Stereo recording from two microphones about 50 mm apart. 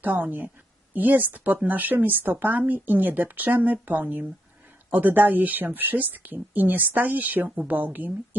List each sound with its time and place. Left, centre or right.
0.0 s speech: right